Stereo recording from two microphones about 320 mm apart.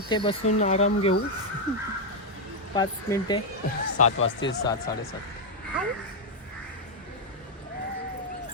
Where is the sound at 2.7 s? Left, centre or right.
Centre.